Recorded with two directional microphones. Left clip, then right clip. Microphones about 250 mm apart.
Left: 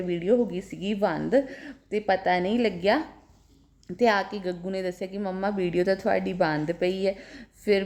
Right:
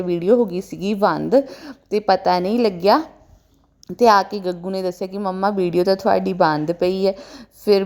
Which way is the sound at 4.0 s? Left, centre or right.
Centre.